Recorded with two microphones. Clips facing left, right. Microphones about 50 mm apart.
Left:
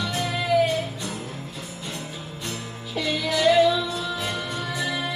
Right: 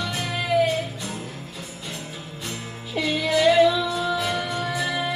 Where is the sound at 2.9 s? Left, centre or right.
Centre.